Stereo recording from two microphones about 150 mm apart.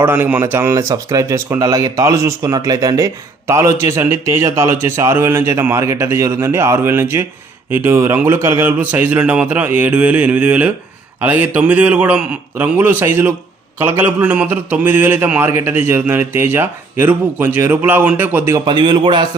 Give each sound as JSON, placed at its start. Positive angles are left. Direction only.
{"t": 0.0, "sound": "a man's voice", "side_deg": -15}
{"t": 18.6, "sound": "a man's voice", "side_deg": -30}